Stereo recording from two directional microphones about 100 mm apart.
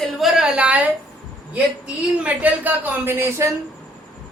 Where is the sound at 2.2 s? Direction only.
15° right (ahead or behind).